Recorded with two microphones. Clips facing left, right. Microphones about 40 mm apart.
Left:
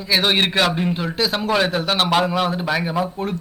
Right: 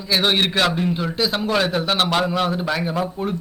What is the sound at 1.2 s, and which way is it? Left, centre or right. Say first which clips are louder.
A man's voice: left 1 dB; centre.